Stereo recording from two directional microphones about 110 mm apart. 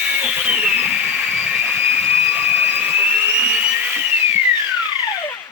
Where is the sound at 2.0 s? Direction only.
15° right (ahead or behind).